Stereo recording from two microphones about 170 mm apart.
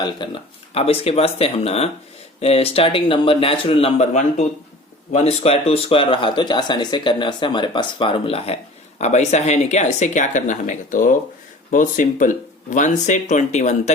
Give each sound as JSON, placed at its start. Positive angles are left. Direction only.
{"t": 0.2, "sound": "speech", "side_deg": 25}